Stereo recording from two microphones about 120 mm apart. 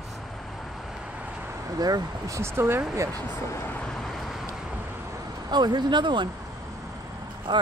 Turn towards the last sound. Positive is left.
turn(degrees=-40)  # may be behind; listen again after turning